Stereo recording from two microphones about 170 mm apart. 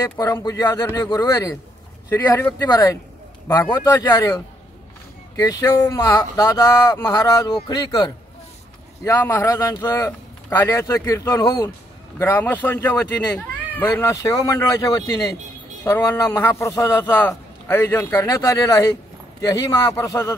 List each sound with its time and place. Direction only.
0.2 s a man's voice: 20° left (ahead or behind)
5.3 s a man's voice: 20° left (ahead or behind)